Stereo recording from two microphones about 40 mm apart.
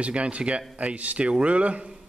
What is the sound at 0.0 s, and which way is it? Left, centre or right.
Speech, right.